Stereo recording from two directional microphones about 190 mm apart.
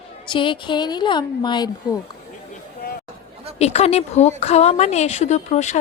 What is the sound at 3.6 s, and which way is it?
A woman's voice, 35° left (ahead or behind).